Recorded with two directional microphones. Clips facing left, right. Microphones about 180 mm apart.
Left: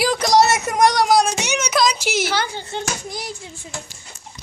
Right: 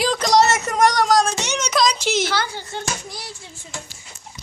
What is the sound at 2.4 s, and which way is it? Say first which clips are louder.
Speech: left 2 dB; 20° left (ahead or behind).